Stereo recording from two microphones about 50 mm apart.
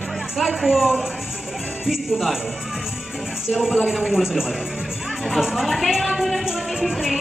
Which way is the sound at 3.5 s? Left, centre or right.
Centre.